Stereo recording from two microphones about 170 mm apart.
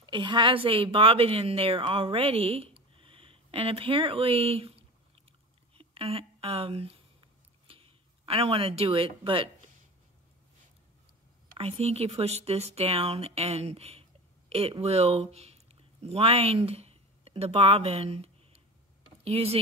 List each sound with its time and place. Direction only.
0.0 s a woman's voice: 25° right (ahead or behind)
5.8 s a sound: 35° right (ahead or behind)
8.3 s speech: 35° right (ahead or behind)
11.5 s speech: 35° right (ahead or behind)